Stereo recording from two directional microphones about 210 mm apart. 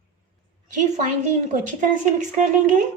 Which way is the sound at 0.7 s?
35° right (ahead or behind).